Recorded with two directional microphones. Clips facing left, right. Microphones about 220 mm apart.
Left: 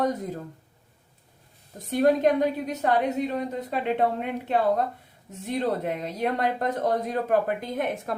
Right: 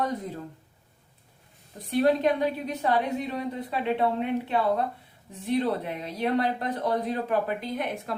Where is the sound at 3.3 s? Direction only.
45° left (ahead or behind).